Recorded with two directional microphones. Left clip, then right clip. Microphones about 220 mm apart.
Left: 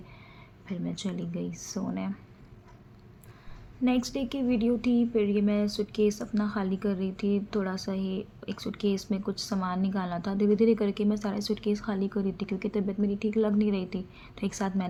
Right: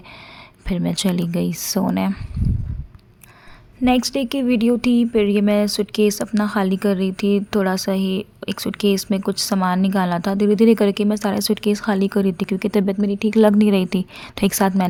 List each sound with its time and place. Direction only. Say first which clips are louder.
0.7 s speech: right 14 dB; 50° right (ahead or behind)
3.8 s speech: right 11 dB; 45° right (ahead or behind)